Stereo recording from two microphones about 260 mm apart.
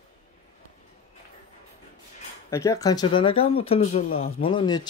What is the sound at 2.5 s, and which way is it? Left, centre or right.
Speech, centre.